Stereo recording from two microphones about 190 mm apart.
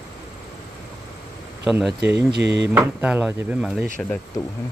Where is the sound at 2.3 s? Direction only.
65° right (ahead or behind).